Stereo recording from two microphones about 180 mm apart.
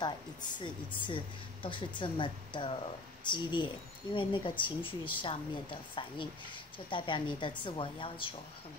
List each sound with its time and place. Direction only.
0.0 s speech: 25° left (ahead or behind)